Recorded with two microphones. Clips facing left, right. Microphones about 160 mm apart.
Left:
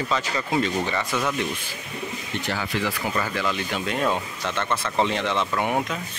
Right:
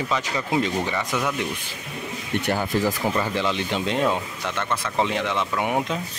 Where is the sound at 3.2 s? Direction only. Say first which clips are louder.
Right 2 dB; 25° right (ahead or behind).